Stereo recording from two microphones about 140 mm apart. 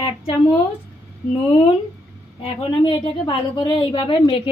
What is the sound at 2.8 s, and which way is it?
Speech, 35° left (ahead or behind).